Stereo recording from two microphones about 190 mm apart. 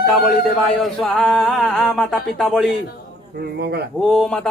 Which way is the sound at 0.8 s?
Centre (ahead or behind).